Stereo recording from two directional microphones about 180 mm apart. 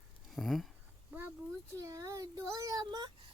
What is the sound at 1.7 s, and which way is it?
Child singing, 15° right (ahead or behind).